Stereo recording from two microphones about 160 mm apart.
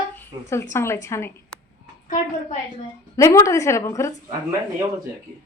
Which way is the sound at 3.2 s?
20° left (ahead or behind).